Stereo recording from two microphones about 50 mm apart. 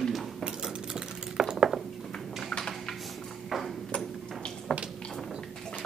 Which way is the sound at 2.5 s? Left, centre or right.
Centre.